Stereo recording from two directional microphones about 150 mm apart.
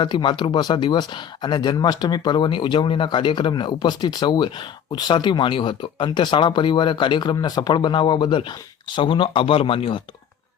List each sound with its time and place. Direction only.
0.0 s speech: 30° left (ahead or behind)